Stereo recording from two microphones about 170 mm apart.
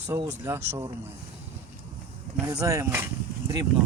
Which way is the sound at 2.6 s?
15° right (ahead or behind).